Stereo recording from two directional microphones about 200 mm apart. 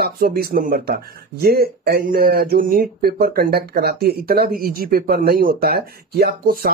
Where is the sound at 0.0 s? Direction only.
50° right (ahead or behind).